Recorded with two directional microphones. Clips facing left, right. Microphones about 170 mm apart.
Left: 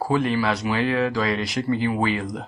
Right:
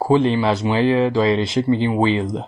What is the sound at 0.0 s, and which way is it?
Speech, 25° right (ahead or behind).